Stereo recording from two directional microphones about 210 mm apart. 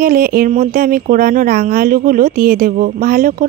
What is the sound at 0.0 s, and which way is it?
Speech, 45° right (ahead or behind).